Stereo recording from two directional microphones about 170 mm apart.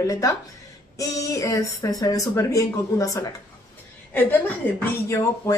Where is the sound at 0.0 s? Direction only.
20° left (ahead or behind).